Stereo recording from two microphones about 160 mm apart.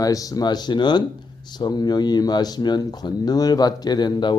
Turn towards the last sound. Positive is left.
turn(degrees=30)  # may be behind; listen again after turning